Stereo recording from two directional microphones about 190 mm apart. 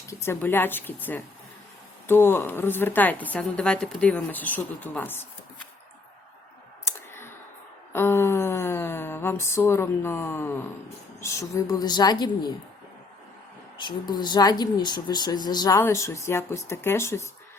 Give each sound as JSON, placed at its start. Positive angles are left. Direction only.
{"t": 0.1, "sound": "a woman's voice", "side_deg": 15}
{"t": 6.8, "sound": "clicking", "side_deg": 10}
{"t": 7.9, "sound": "a sound", "side_deg": 10}
{"t": 11.2, "sound": "speech", "side_deg": 15}
{"t": 13.7, "sound": "a woman's voice", "side_deg": 25}